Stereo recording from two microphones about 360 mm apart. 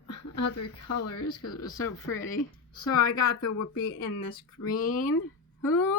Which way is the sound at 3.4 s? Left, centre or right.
Left.